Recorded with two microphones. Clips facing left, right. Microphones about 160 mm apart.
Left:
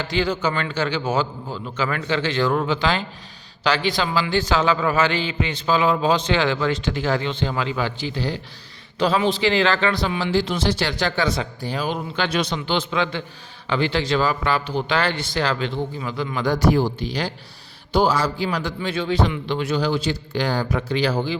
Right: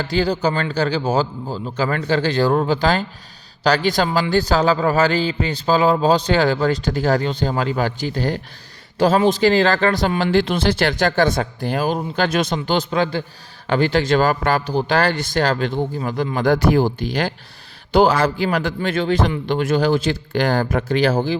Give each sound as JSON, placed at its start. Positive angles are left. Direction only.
{"t": 0.0, "sound": "a man's voice", "side_deg": -35}